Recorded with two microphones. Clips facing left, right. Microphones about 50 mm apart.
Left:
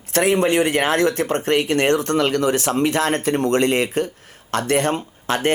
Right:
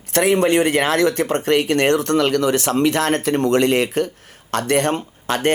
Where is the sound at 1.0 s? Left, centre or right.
Left.